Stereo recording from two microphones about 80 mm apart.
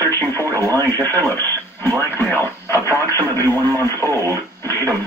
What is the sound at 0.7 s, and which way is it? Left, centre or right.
Speech, left.